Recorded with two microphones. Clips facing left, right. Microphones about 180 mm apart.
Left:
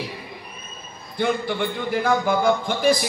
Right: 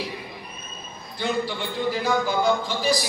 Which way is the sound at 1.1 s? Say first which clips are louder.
Left 3 dB; 55° left (ahead or behind).